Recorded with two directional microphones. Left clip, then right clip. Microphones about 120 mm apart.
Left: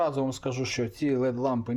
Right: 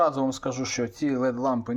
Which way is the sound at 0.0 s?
10° left (ahead or behind).